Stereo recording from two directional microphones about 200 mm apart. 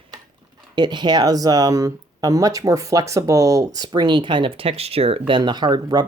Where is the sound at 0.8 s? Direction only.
20° right (ahead or behind).